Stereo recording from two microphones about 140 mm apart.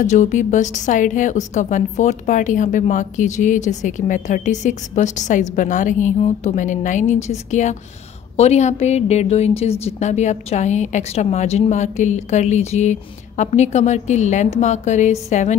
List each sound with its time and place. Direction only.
0.0 s a woman's voice: 60° left (ahead or behind)